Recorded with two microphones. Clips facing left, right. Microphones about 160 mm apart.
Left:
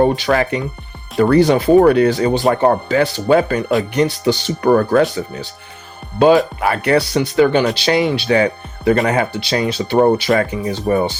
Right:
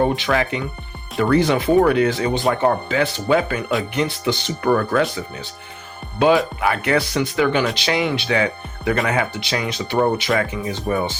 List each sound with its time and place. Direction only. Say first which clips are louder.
0.2 s speech: left 4 dB; 40° left (ahead or behind)